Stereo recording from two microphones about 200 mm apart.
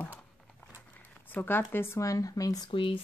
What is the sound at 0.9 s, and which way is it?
Speech, 10° left (ahead or behind).